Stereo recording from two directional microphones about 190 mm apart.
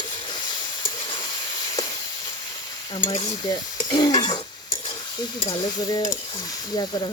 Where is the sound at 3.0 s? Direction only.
35° left (ahead or behind).